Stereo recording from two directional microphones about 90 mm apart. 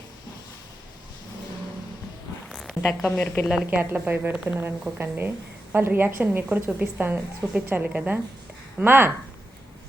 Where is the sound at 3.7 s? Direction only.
15° right (ahead or behind).